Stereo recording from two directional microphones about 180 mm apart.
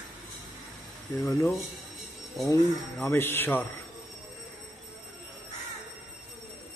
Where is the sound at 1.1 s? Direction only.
15° left (ahead or behind).